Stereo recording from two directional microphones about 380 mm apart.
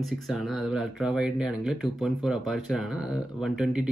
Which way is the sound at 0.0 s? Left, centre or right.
Centre.